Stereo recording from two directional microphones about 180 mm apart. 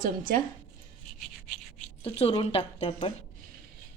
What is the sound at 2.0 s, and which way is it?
A woman's voice, 30° left (ahead or behind).